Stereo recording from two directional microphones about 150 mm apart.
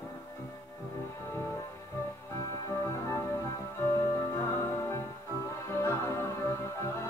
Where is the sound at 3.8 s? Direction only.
15° left (ahead or behind).